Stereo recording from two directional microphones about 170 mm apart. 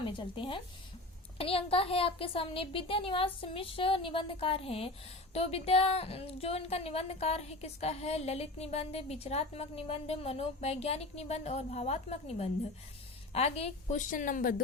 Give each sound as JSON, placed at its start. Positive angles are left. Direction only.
{"t": 0.0, "sound": "a woman's voice", "side_deg": 30}